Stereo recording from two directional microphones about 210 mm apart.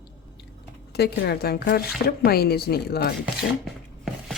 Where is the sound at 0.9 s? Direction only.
50° left (ahead or behind).